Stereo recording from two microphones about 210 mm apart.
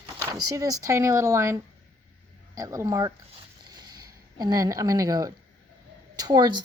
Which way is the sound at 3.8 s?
20° right (ahead or behind).